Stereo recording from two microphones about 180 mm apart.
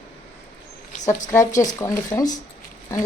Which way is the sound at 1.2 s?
15° left (ahead or behind).